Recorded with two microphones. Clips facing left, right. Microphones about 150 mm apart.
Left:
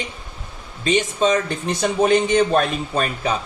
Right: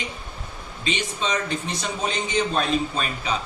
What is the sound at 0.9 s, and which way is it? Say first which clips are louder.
A man's voice: left 9 dB; 45° left (ahead or behind).